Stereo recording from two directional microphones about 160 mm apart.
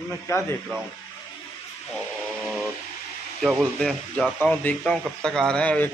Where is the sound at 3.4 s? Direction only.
Centre (ahead or behind).